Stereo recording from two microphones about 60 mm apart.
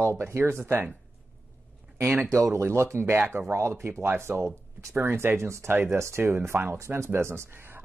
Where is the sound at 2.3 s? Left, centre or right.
Right.